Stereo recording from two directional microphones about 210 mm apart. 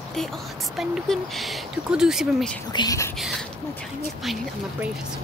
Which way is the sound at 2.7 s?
20° left (ahead or behind).